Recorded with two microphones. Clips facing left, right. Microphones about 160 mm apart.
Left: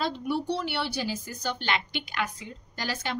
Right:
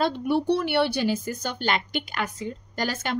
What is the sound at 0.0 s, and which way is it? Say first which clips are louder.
A woman's voice: right 6 dB; 55° right (ahead or behind).